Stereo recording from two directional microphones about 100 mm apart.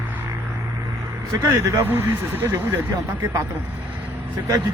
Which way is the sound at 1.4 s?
30° right (ahead or behind).